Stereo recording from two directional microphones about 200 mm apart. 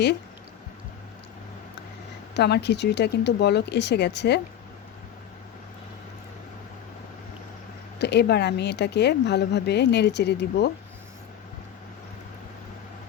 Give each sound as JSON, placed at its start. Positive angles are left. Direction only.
{"t": 2.3, "sound": "speech", "side_deg": 55}
{"t": 7.9, "sound": "speech", "side_deg": 55}